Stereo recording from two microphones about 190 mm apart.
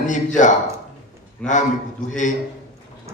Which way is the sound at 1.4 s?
5° left (ahead or behind).